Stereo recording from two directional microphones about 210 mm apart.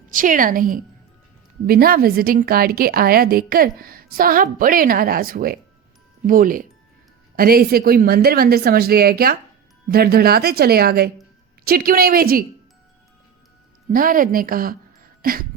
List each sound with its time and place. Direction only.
0.1 s a woman's voice: 40° right (ahead or behind)
13.9 s a woman's voice: 40° right (ahead or behind)
15.2 s a sound: 45° right (ahead or behind)